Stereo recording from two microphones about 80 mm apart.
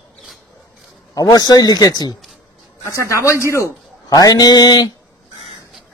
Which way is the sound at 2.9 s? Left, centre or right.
Left.